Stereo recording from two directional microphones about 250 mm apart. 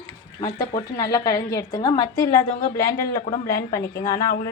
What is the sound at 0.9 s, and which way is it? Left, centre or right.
A woman's voice, centre.